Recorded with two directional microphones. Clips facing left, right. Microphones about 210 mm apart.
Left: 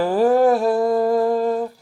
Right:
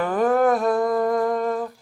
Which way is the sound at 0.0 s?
30° left (ahead or behind).